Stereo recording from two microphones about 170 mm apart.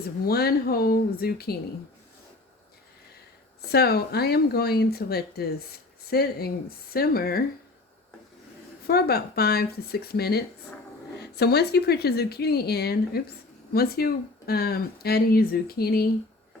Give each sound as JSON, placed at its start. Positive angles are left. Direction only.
{"t": 0.0, "sound": "speech", "side_deg": 65}
{"t": 3.6, "sound": "speech", "side_deg": 70}
{"t": 8.9, "sound": "speech", "side_deg": 65}